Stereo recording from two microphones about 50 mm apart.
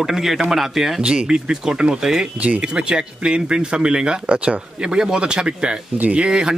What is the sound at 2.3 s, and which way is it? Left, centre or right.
Speech, right.